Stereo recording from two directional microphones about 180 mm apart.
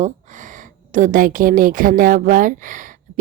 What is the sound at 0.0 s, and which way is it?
A woman's voice, 45° right (ahead or behind).